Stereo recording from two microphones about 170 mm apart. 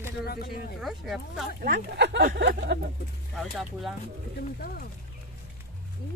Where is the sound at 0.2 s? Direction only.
65° left (ahead or behind).